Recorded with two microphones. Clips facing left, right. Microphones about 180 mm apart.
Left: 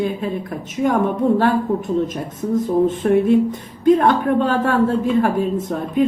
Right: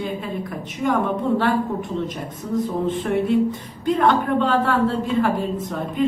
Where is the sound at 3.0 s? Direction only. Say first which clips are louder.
Left 8 dB; 40° left (ahead or behind).